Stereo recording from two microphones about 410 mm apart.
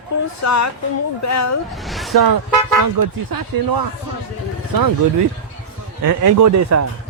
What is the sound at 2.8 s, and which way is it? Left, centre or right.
Speech, right.